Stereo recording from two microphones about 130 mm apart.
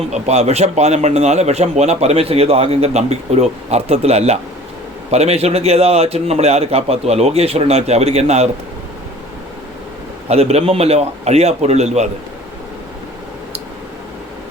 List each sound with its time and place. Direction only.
0.1 s a man's voice: 60° right (ahead or behind)
10.2 s a man's voice: 50° right (ahead or behind)